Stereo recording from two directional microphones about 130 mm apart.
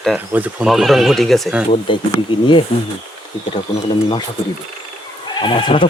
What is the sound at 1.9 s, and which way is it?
Speech, 40° left (ahead or behind).